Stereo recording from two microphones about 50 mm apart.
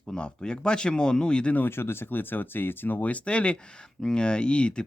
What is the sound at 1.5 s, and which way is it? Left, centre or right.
Speech, left.